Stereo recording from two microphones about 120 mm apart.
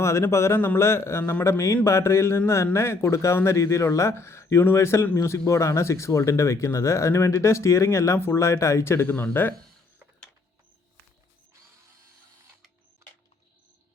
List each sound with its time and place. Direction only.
0.0 s speech: 25° left (ahead or behind)